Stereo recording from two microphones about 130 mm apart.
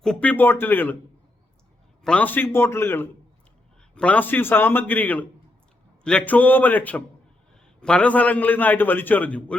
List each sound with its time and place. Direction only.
0.0 s a man's voice: 10° left (ahead or behind)
2.0 s a man's voice: 10° left (ahead or behind)